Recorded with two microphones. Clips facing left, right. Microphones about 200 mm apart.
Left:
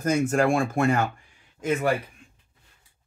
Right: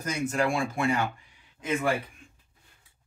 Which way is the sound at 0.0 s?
50° left (ahead or behind).